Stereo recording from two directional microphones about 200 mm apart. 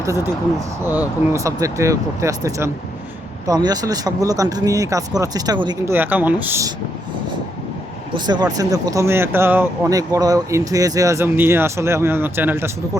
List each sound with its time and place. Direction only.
0.9 s speech: 10° right (ahead or behind)
5.9 s speech: 10° right (ahead or behind)
8.1 s speech: 20° right (ahead or behind)